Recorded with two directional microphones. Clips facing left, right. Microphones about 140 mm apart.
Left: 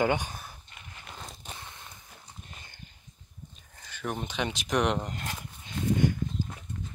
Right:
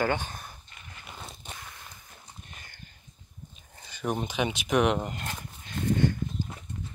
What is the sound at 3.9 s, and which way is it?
Speech, 15° right (ahead or behind).